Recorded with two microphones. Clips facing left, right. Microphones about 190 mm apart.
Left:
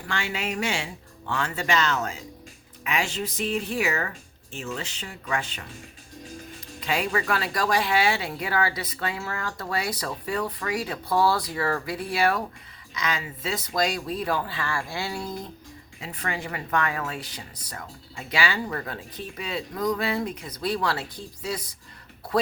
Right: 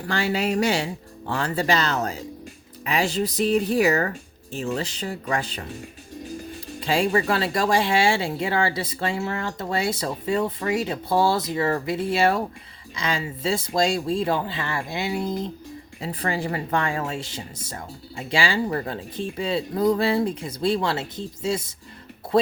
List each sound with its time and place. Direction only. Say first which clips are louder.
0.1 s speech: right 7 dB; 35° right (ahead or behind)
6.7 s speech: right 5 dB; 30° right (ahead or behind)
16.0 s speech: right 6 dB; 35° right (ahead or behind)